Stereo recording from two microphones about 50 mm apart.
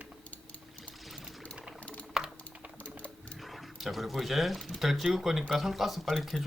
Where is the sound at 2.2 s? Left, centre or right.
Centre.